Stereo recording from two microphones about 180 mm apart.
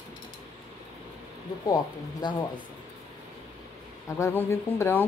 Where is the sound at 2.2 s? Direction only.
25° left (ahead or behind).